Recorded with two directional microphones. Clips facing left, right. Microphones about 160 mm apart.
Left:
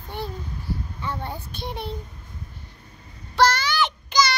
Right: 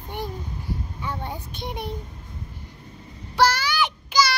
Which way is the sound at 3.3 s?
10° right (ahead or behind).